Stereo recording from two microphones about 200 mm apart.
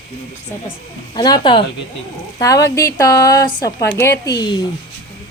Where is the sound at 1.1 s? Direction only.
20° left (ahead or behind).